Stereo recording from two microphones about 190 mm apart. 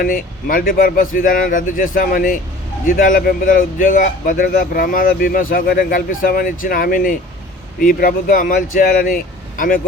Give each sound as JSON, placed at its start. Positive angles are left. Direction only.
{"t": 0.0, "sound": "a man's voice", "side_deg": 45}